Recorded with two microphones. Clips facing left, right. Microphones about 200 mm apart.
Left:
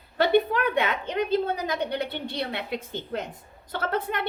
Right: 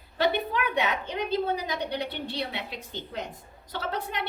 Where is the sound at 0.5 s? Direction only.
55° left (ahead or behind).